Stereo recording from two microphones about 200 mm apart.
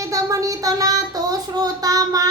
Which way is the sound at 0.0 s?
15° right (ahead or behind).